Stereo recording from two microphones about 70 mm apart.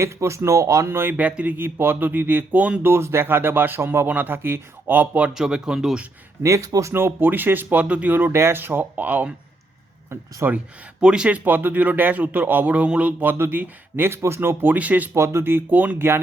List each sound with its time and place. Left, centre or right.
0.0 s speech: right
0.9 s speech: right
1.1 s speech: right
2.8 s speech: right
5.3 s speech: centre
6.4 s speech: right
6.9 s speech: right
10.4 s speech: right
11.0 s speech: centre
15.1 s speech: right